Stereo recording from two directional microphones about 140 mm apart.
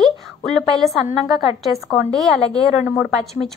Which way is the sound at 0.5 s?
Centre (ahead or behind).